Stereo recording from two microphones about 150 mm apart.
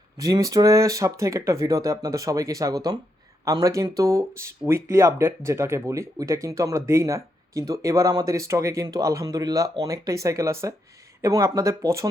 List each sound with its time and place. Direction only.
0.2 s speech: 25° right (ahead or behind)